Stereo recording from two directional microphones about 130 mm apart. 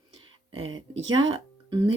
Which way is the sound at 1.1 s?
35° right (ahead or behind).